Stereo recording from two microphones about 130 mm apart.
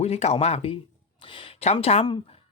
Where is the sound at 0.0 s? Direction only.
55° left (ahead or behind).